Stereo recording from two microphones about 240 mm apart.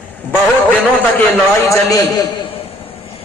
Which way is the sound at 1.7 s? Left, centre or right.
Centre.